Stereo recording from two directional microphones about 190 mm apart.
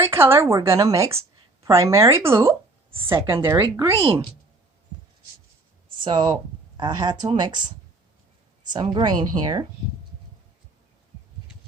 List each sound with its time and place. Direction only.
0.0 s speech: 10° right (ahead or behind)
4.0 s a woman's voice: 30° right (ahead or behind)
5.9 s a woman's voice: 25° right (ahead or behind)
8.7 s a woman's voice: 25° right (ahead or behind)